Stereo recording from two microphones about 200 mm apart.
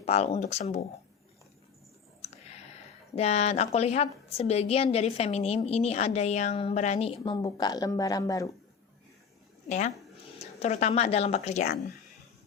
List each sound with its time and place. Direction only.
0.0 s a woman's voice: 30° left (ahead or behind)
3.2 s a woman's voice: 35° left (ahead or behind); by 8.4 s 15° left (ahead or behind)
9.6 s speech: 35° left (ahead or behind)